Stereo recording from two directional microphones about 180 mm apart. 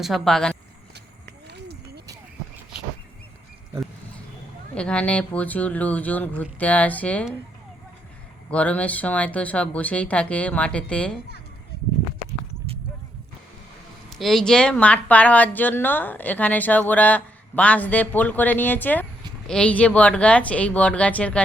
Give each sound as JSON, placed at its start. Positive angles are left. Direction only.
{"t": 0.0, "sound": "speech", "side_deg": 0}
{"t": 1.5, "sound": "a sound", "side_deg": -70}
{"t": 4.7, "sound": "speech", "side_deg": 5}
{"t": 8.4, "sound": "speech", "side_deg": 5}
{"t": 14.1, "sound": "speech", "side_deg": 0}